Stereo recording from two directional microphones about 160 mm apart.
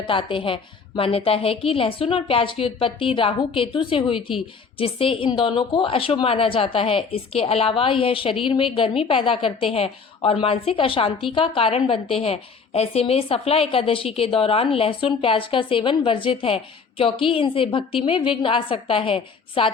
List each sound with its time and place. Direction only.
0.0 s a woman's voice: 30° left (ahead or behind)